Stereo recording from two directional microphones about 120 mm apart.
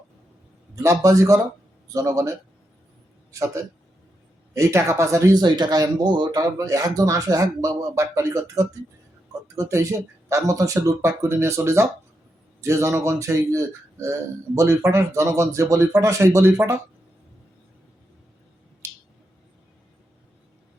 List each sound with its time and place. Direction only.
0.8 s speech: 25° right (ahead or behind)
3.3 s speech: 25° right (ahead or behind)